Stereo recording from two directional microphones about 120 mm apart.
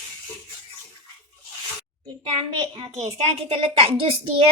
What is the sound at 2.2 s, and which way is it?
A woman's voice, 55° right (ahead or behind).